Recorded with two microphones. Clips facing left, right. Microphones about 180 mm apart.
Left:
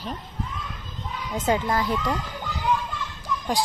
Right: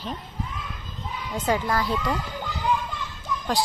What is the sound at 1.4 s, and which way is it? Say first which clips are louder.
Speech: left 1 dB; 20° left (ahead or behind).